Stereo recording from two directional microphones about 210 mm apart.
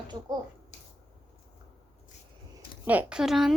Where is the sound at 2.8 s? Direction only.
5° right (ahead or behind).